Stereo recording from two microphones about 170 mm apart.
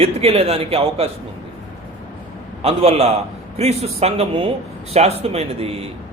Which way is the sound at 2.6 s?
35° right (ahead or behind).